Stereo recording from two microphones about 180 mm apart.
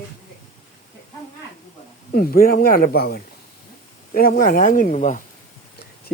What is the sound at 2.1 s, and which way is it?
Speech, 55° left (ahead or behind).